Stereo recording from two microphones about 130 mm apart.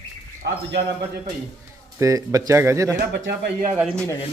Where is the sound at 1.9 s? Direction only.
25° right (ahead or behind).